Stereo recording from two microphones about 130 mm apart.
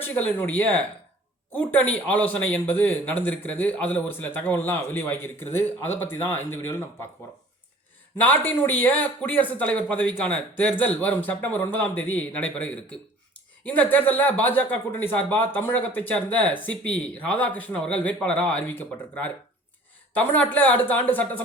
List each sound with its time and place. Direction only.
0.0 s a man's voice: 15° left (ahead or behind)
8.1 s a man's voice: 15° left (ahead or behind)